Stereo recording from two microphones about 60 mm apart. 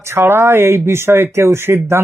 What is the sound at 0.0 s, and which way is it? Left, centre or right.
Speech, right.